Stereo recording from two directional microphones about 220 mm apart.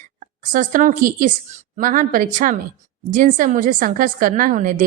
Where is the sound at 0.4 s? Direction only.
40° right (ahead or behind).